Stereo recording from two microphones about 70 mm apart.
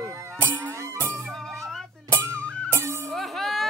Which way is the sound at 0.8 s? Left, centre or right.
Right.